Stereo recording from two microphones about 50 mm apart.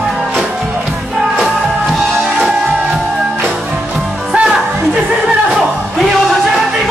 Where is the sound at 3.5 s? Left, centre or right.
Centre.